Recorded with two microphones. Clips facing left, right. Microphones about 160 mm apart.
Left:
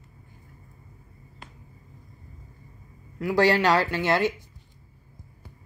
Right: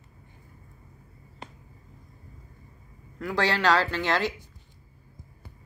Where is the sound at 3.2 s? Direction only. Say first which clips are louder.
Left 5 dB; 10° left (ahead or behind).